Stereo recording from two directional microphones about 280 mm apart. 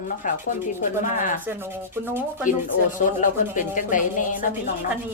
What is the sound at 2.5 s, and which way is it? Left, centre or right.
Speech, left.